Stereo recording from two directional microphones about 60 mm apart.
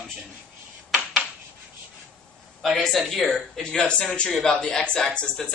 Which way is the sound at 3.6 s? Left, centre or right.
Centre.